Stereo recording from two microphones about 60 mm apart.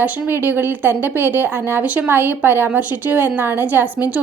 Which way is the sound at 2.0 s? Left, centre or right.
Right.